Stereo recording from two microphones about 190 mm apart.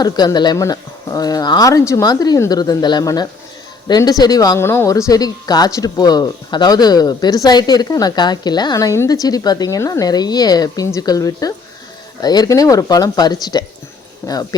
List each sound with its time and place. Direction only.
0.0 s speech: 20° left (ahead or behind)